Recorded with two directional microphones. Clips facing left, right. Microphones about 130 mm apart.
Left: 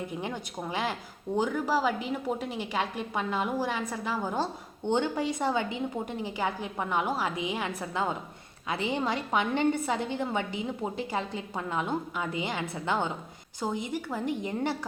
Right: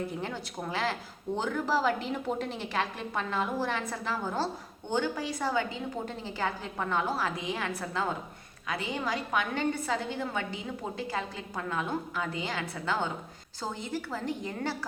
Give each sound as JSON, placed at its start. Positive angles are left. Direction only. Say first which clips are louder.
{"t": 0.2, "sound": "a woman's voice", "louder": "left 1 dB", "side_deg": 15}